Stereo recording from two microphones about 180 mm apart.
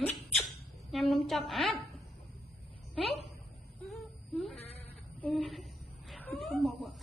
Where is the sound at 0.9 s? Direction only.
Centre (ahead or behind).